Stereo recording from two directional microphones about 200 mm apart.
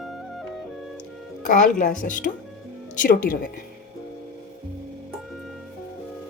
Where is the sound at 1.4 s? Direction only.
40° left (ahead or behind).